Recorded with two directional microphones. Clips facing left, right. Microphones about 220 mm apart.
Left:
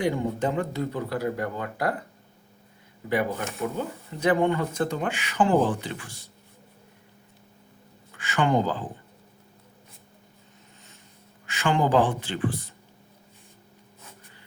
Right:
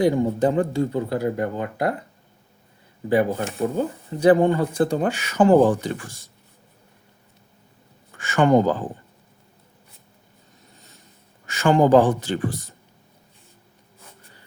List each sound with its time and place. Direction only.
0.0 s speech: 35° right (ahead or behind)
3.1 s speech: 30° right (ahead or behind)
8.2 s a man's voice: 45° right (ahead or behind)
11.4 s a man's voice: 40° right (ahead or behind)